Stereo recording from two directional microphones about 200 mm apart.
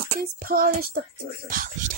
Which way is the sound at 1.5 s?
45° right (ahead or behind).